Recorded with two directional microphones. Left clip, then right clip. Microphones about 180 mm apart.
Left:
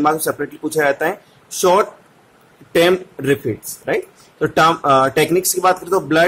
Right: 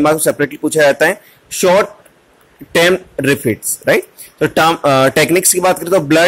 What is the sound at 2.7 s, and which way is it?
Speech, 20° right (ahead or behind).